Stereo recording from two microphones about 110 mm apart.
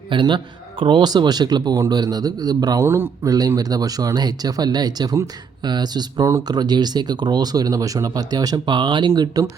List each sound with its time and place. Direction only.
0.1 s a man's voice: 45° right (ahead or behind)
2.8 s speech: 20° right (ahead or behind)
3.3 s speech: 35° right (ahead or behind)